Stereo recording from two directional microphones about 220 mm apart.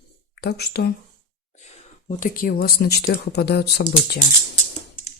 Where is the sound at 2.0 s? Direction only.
35° left (ahead or behind).